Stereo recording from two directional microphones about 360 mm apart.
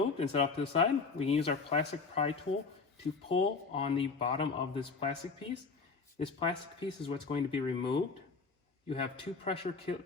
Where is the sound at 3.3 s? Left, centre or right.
Centre.